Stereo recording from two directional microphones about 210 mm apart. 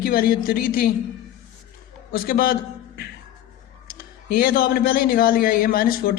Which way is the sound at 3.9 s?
45° left (ahead or behind).